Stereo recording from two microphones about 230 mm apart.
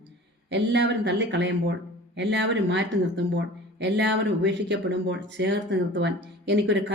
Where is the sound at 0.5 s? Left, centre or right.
Right.